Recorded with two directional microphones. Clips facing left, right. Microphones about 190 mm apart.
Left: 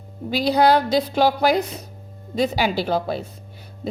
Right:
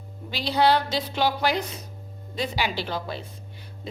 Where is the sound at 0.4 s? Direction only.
45° left (ahead or behind).